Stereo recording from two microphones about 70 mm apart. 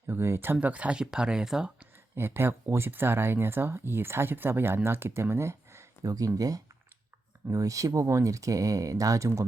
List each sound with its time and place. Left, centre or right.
0.1 s speech: right
0.5 s speech: centre
2.1 s speech: right
6.0 s speech: right